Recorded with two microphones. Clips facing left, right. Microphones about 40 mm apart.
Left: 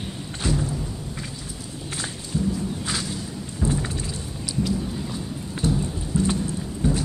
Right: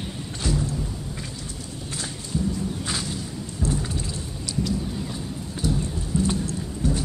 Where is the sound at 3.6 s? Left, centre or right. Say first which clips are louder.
Left 2 dB; left.